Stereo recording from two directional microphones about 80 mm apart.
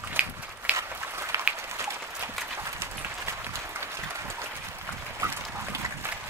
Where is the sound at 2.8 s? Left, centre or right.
Right.